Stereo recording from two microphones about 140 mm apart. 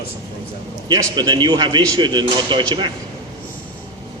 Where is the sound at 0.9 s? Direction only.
30° right (ahead or behind).